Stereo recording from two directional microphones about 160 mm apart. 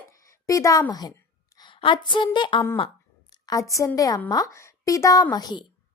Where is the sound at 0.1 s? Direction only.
20° left (ahead or behind).